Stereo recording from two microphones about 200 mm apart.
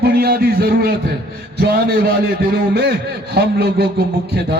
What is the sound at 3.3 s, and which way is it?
Speech, 50° right (ahead or behind).